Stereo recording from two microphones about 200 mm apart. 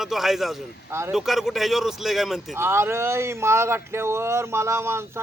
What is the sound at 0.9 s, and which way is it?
Speech, 15° right (ahead or behind).